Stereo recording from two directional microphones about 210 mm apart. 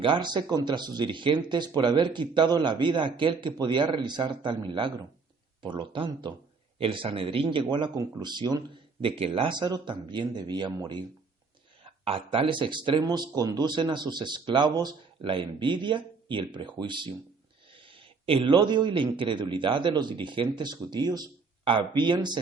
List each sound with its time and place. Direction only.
0.0 s speech: 20° right (ahead or behind)